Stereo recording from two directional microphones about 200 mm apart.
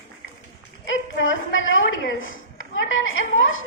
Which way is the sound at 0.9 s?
75° left (ahead or behind).